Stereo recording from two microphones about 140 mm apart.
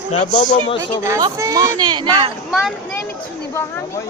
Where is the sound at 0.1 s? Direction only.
55° left (ahead or behind).